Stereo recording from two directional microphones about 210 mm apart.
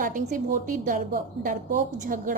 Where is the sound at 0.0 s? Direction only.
40° right (ahead or behind).